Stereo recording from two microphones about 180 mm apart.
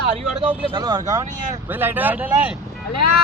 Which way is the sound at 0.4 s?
20° right (ahead or behind).